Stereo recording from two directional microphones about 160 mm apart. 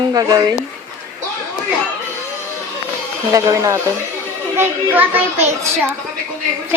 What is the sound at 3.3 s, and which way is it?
Speech, 20° right (ahead or behind).